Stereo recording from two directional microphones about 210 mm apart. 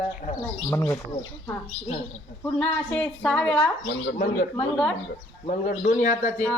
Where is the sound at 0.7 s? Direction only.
15° left (ahead or behind).